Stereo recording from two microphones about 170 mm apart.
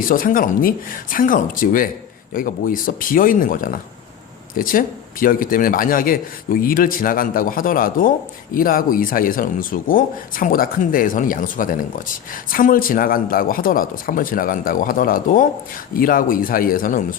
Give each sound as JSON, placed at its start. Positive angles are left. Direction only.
{"t": 0.0, "sound": "speech", "side_deg": 55}